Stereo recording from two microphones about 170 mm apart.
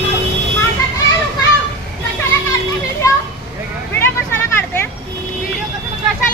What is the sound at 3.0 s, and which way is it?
Children playing, 20° left (ahead or behind).